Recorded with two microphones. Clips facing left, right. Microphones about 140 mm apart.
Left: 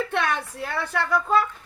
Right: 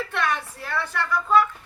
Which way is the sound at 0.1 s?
55° left (ahead or behind).